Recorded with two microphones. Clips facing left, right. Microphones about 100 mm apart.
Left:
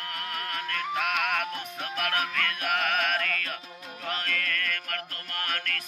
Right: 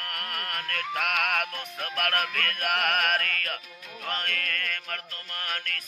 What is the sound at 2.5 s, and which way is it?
Music, 55° right (ahead or behind).